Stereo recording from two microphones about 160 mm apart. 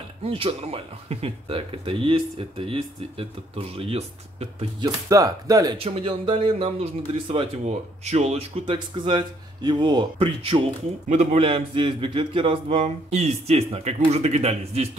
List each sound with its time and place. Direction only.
0.2 s speech: 35° right (ahead or behind)
4.8 s speech: 20° right (ahead or behind)
5.8 s speech: 35° right (ahead or behind)
8.7 s speech: 30° right (ahead or behind)